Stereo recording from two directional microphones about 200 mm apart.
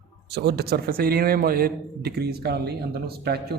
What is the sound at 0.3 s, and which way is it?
Speech, 55° right (ahead or behind).